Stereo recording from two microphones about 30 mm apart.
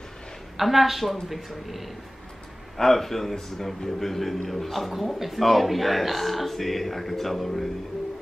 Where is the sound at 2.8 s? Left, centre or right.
Centre.